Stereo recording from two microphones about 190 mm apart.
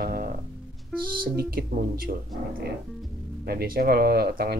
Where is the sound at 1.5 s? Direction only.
50° right (ahead or behind).